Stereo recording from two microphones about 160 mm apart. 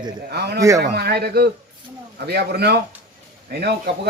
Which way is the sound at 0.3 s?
90° right.